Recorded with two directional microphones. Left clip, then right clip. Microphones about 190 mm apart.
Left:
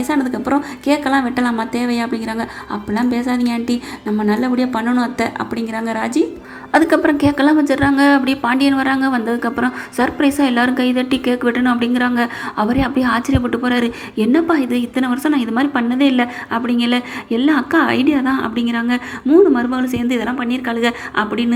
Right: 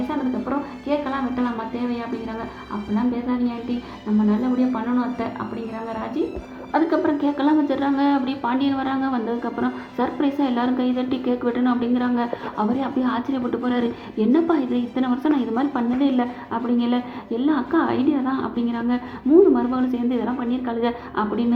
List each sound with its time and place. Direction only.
0.1 s a woman's voice: 35° left (ahead or behind)
6.7 s a woman's voice: 25° left (ahead or behind)